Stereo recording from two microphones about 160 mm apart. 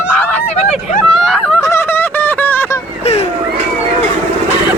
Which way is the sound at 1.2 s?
5° left (ahead or behind).